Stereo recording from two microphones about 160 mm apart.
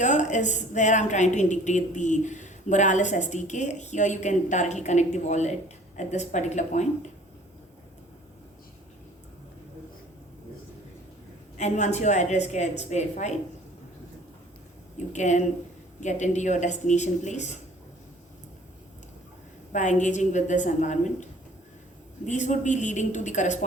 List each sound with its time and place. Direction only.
0.0 s a woman's voice: 50° left (ahead or behind)
11.5 s a woman's voice: 45° left (ahead or behind)
14.9 s a woman's voice: 50° left (ahead or behind)
19.7 s a woman's voice: 50° left (ahead or behind)
22.3 s a woman's voice: 50° left (ahead or behind)